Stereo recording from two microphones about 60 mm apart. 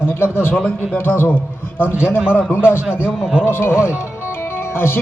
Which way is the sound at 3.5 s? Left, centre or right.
Left.